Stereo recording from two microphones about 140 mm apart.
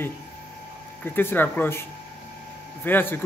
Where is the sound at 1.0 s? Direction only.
15° left (ahead or behind).